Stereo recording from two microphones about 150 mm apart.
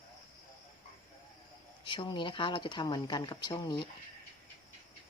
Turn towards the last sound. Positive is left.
turn(degrees=30)  # may be behind; listen again after turning